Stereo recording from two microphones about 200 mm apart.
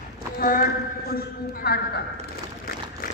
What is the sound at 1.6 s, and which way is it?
Speech, 55° left (ahead or behind).